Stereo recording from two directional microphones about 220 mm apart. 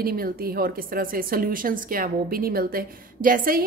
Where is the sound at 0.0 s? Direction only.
40° right (ahead or behind).